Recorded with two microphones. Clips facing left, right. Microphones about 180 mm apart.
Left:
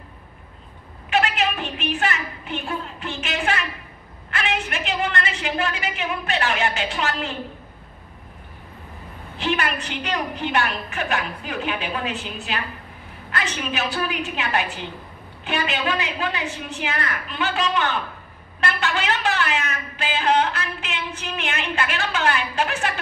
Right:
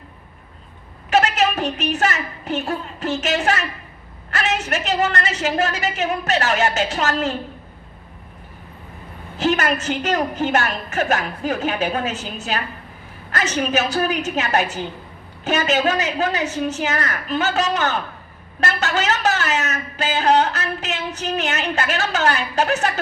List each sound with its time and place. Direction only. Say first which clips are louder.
1.1 s a woman's voice: right 4 dB; 40° right (ahead or behind)
9.4 s a woman's voice: right 5 dB; 40° right (ahead or behind)